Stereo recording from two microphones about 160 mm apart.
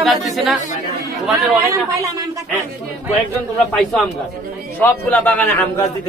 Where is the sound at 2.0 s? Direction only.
20° right (ahead or behind).